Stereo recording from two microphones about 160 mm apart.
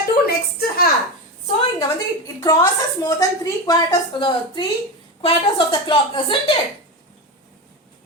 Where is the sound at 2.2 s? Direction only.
20° left (ahead or behind).